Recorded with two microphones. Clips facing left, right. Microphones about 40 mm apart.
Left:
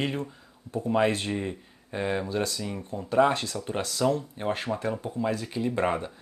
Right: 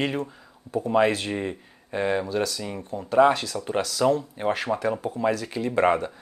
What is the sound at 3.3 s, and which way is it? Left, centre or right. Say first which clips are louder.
Speech: right 4 dB; right.